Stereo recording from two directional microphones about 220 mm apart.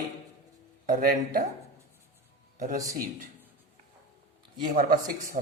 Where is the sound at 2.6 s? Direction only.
35° right (ahead or behind).